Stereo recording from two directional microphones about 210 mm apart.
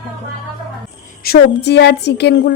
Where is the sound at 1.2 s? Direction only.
50° left (ahead or behind).